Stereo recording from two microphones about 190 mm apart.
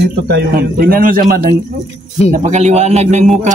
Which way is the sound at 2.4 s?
35° right (ahead or behind).